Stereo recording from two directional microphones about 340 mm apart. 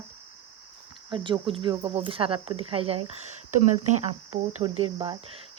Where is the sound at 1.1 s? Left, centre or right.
Centre.